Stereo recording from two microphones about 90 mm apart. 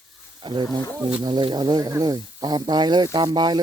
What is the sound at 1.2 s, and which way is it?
Snake, 60° right (ahead or behind).